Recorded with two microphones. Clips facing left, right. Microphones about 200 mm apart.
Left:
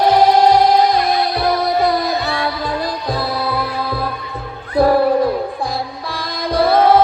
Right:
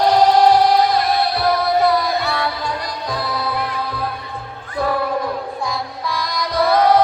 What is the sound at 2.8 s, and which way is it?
Music, 30° left (ahead or behind).